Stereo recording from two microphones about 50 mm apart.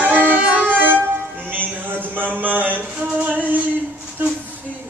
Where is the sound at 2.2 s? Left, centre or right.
Right.